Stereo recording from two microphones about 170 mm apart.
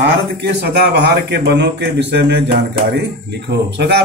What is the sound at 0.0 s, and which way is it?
A man's voice, 80° right.